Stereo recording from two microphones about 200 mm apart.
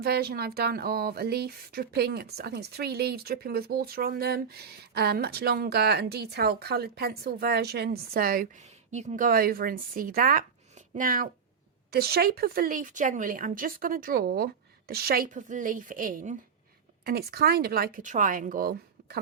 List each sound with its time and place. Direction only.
0.0 s speech: 50° right (ahead or behind)
8.9 s speech: 35° right (ahead or behind); by 19.2 s 50° right (ahead or behind)